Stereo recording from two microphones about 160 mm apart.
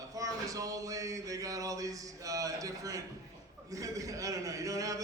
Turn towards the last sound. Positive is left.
turn(degrees=-20)  # may be behind; listen again after turning